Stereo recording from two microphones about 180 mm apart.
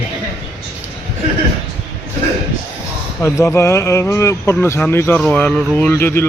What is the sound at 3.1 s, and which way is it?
Speech, 15° left (ahead or behind).